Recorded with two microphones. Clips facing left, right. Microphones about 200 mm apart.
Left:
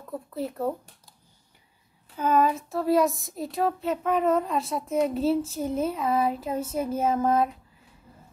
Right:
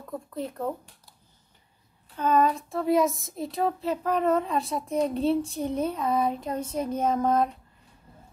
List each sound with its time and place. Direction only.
0.3 s a child's voice: 5° left (ahead or behind)
2.1 s a child's voice: 5° left (ahead or behind)